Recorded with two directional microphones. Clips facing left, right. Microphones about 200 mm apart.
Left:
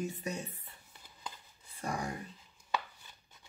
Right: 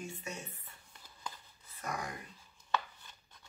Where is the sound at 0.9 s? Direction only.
15° left (ahead or behind).